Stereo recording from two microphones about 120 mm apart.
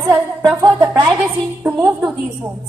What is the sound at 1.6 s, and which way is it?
Speech, 20° right (ahead or behind).